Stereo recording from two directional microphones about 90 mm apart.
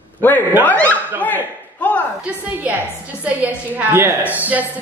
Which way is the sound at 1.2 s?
15° left (ahead or behind).